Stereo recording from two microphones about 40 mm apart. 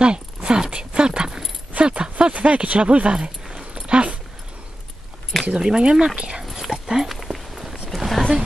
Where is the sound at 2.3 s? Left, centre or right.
Right.